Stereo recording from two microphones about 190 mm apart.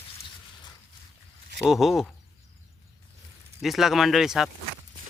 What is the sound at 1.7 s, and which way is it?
Speech, centre (ahead or behind).